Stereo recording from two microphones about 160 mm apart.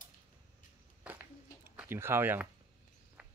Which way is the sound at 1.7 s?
15° right (ahead or behind).